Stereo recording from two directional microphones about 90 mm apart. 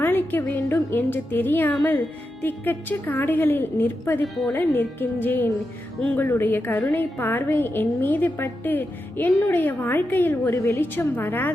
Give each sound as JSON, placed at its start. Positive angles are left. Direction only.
{"t": 0.0, "sound": "music", "side_deg": 25}
{"t": 0.9, "sound": "a woman's voice", "side_deg": 20}
{"t": 10.5, "sound": "a woman's voice", "side_deg": 30}